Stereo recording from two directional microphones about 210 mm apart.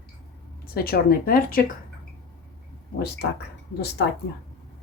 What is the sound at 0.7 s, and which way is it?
Speech, 45° left (ahead or behind).